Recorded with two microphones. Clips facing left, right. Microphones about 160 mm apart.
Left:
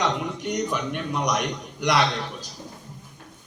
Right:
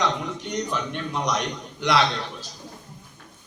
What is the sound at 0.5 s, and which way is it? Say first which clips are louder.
A man's voice: left 1 dB; 10° left (ahead or behind).